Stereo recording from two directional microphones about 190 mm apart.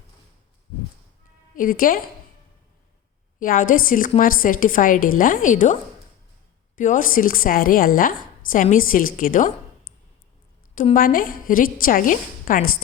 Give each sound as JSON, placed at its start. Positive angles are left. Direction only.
{"t": 1.5, "sound": "a woman's voice", "side_deg": 45}
{"t": 3.4, "sound": "a woman's voice", "side_deg": 45}
{"t": 6.7, "sound": "a woman's voice", "side_deg": 45}
{"t": 10.9, "sound": "a woman's voice", "side_deg": 50}